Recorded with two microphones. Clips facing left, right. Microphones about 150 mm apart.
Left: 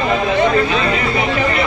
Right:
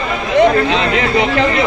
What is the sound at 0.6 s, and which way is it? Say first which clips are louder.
Speech: right 2 dB; 85° right.